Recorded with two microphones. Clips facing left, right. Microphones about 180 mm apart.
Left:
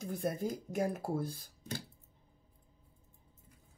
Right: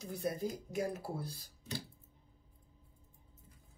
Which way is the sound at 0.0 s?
50° left (ahead or behind).